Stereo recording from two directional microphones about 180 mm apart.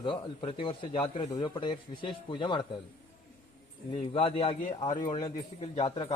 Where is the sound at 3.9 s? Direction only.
30° left (ahead or behind).